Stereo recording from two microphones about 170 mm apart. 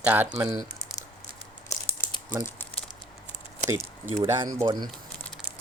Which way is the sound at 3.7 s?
15° right (ahead or behind).